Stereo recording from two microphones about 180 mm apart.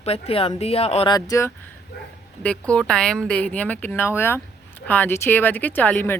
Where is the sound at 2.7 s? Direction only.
5° left (ahead or behind).